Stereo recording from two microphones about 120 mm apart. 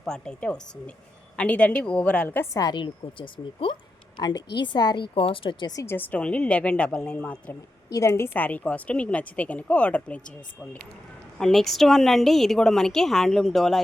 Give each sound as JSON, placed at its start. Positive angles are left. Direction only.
{"t": 0.0, "sound": "a woman's voice", "side_deg": 5}
{"t": 2.5, "sound": "a woman's voice", "side_deg": 30}
{"t": 5.1, "sound": "a woman's voice", "side_deg": 50}
{"t": 5.8, "sound": "a woman's voice", "side_deg": 20}
{"t": 7.9, "sound": "a woman's voice", "side_deg": 25}